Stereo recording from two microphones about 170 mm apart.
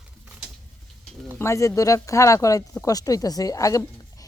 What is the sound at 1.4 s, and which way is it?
Speech, 15° left (ahead or behind).